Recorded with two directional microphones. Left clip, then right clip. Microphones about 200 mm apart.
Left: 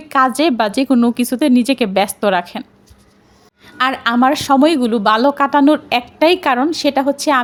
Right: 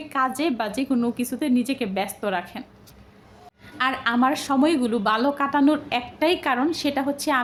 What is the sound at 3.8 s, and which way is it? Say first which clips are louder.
Speech: left 7 dB; 40° left (ahead or behind).